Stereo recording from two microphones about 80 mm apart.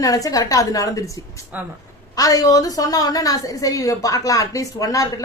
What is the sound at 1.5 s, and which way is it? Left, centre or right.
Speech, centre.